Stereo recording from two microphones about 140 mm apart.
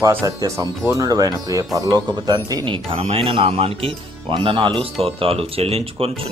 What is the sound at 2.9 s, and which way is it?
Speech, 45° right (ahead or behind).